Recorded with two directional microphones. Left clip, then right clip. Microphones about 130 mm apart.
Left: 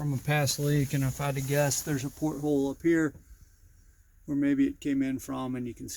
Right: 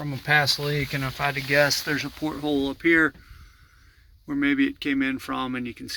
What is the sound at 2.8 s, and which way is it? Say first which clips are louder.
Speech: right 10 dB; 20° left (ahead or behind).